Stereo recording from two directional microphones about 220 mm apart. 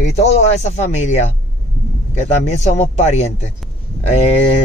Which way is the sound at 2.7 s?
30° left (ahead or behind).